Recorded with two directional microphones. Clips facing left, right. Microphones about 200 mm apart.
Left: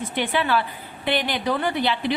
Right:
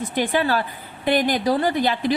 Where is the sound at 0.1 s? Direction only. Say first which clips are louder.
Right 2 dB; 40° right (ahead or behind).